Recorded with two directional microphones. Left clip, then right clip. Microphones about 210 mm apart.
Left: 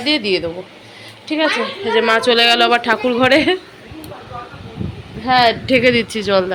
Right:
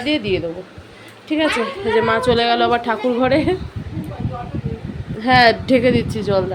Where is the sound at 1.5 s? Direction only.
15° right (ahead or behind).